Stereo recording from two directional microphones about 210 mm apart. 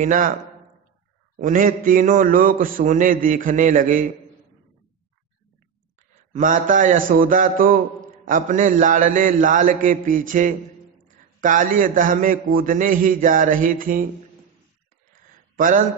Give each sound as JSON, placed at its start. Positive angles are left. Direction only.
{"t": 0.0, "sound": "a man's voice", "side_deg": -40}
{"t": 1.3, "sound": "a man's voice", "side_deg": -40}
{"t": 6.3, "sound": "a man's voice", "side_deg": -40}
{"t": 15.5, "sound": "speech", "side_deg": -40}